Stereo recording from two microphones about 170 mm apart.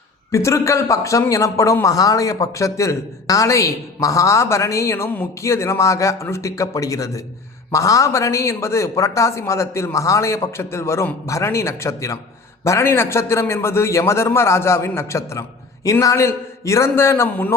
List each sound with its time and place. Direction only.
0.3 s a man's voice: 15° left (ahead or behind)